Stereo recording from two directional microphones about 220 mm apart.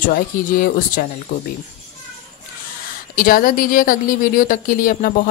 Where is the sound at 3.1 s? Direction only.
40° left (ahead or behind).